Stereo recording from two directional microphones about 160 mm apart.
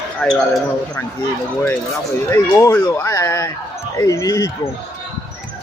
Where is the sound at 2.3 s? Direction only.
15° left (ahead or behind).